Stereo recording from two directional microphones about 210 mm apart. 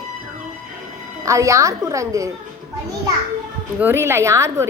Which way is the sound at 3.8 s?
10° right (ahead or behind).